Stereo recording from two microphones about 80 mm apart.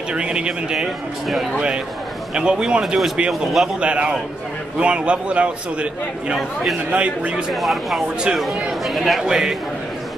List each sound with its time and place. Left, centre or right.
0.1 s a man's voice: centre
6.9 s a man's voice: centre
7.5 s speech: centre